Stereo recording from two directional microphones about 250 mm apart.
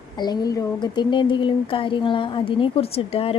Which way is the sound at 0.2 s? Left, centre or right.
Centre.